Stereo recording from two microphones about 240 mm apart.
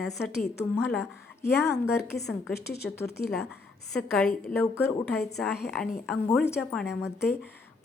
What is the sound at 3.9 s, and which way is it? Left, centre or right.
Speech, centre.